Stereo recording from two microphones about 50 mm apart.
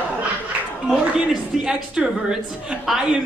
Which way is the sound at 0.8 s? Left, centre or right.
Centre.